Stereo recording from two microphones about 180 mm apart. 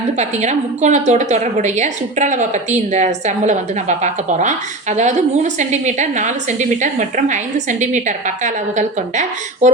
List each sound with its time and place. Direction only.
0.2 s a woman's voice: 40° right (ahead or behind)